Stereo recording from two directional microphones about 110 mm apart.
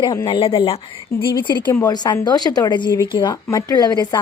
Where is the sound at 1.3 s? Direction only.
45° left (ahead or behind).